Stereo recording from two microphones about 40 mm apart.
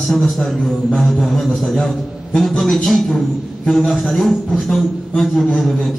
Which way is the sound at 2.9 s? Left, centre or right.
Centre.